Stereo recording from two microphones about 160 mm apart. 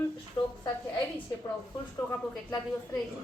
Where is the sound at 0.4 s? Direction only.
25° left (ahead or behind).